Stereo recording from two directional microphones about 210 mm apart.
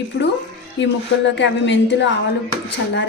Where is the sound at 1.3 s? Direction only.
60° left (ahead or behind).